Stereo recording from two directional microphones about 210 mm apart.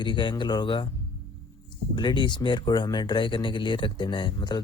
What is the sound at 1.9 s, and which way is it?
Speech, 20° left (ahead or behind).